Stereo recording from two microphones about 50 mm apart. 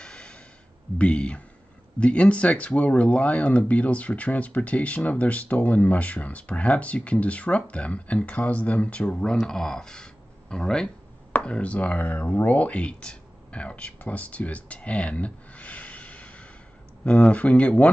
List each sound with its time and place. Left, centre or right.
0.0 s a sound: left
0.9 s speech: left
11.4 s speech: left